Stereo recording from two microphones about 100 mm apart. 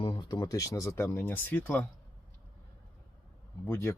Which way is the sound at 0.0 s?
50° left (ahead or behind).